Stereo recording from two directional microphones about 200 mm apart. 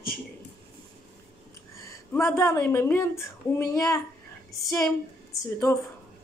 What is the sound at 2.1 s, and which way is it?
Speech, 15° left (ahead or behind).